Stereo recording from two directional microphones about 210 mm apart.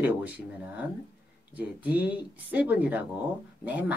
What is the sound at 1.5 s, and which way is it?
Speech, 5° right (ahead or behind).